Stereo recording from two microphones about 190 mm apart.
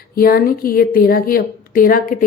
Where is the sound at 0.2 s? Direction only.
50° left (ahead or behind).